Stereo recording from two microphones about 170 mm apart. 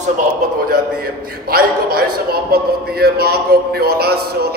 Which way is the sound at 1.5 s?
65° right (ahead or behind).